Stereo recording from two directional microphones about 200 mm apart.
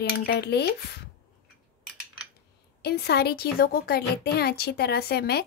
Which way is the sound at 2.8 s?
55° left (ahead or behind).